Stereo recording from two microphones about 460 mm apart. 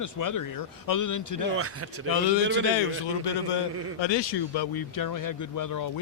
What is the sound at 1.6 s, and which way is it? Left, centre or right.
Speech, right.